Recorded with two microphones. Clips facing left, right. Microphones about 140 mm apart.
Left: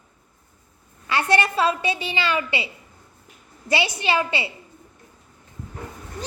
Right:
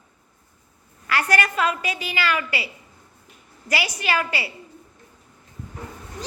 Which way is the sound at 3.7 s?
25° left (ahead or behind).